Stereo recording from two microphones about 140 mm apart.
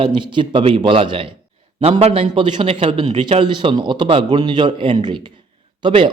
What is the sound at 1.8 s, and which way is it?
Speech, 50° right (ahead or behind).